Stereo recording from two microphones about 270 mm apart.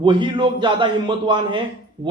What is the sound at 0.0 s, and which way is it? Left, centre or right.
A man's voice, centre.